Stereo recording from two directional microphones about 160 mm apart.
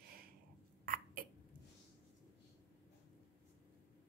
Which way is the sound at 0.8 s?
65° right (ahead or behind).